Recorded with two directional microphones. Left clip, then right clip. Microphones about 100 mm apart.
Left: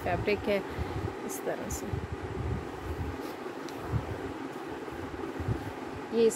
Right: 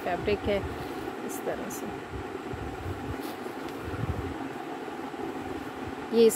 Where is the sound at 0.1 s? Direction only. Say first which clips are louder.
Right 1 dB; 10° left (ahead or behind).